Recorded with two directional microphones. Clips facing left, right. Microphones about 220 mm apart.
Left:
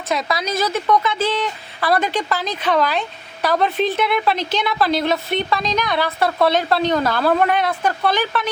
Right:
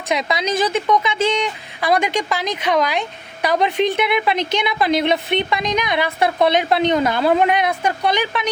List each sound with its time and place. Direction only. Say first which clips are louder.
0.1 s a woman's voice: right 2 dB; 20° right (ahead or behind)